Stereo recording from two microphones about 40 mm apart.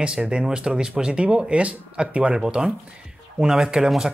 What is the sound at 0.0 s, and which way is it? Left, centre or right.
Speech, right.